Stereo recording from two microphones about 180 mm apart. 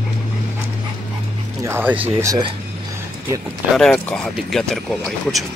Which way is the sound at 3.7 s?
5° left (ahead or behind).